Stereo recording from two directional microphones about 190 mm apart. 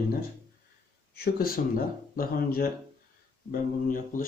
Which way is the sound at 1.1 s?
55° left (ahead or behind).